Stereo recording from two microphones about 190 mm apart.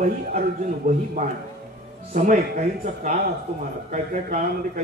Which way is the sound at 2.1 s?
40° right (ahead or behind).